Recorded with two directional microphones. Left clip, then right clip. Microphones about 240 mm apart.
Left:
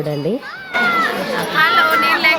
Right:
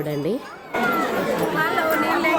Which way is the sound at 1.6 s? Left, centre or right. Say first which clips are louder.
Left 11 dB; right.